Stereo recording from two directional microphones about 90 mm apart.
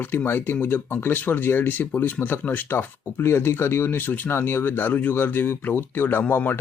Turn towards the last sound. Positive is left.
turn(degrees=25)  # may be behind; listen again after turning